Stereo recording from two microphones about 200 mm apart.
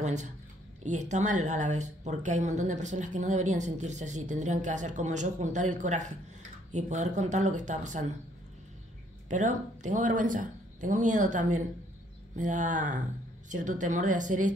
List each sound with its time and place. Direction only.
0.0 s a sound: 35° right (ahead or behind)
0.8 s speech: 35° right (ahead or behind)
9.3 s speech: 40° right (ahead or behind)